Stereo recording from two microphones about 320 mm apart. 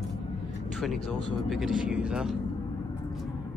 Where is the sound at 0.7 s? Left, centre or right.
Centre.